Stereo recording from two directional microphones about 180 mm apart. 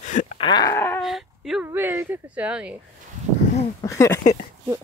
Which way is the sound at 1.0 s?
Centre (ahead or behind).